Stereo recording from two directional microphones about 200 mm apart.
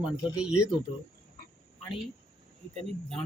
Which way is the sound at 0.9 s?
30° left (ahead or behind).